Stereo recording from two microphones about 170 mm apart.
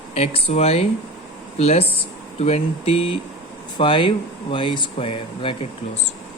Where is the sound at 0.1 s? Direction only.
35° left (ahead or behind).